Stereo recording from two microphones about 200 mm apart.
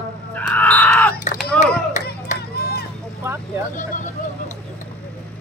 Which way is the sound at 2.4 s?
50° left (ahead or behind).